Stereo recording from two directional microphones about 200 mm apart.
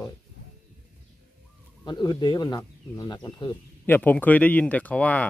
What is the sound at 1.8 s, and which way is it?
Speech, 20° left (ahead or behind).